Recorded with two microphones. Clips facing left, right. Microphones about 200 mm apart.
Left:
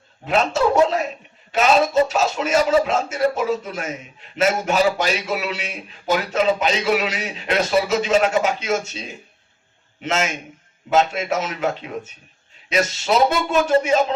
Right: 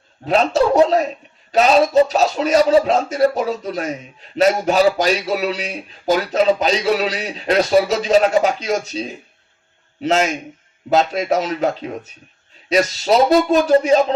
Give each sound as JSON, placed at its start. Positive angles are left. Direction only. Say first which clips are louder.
{"t": 0.3, "sound": "speech", "louder": "right 3 dB", "side_deg": -35}